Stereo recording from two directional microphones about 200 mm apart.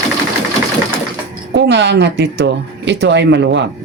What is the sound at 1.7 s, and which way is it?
Speech, 60° right (ahead or behind).